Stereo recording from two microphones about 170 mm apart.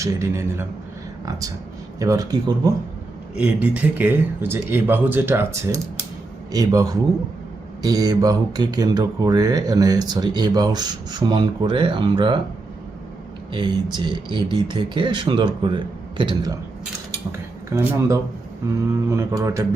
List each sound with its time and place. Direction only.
0.0 s speech: 15° right (ahead or behind)
3.3 s speech: 5° right (ahead or behind); by 12.4 s 30° right (ahead or behind)
13.5 s speech: 25° right (ahead or behind)
17.3 s speech: 15° right (ahead or behind)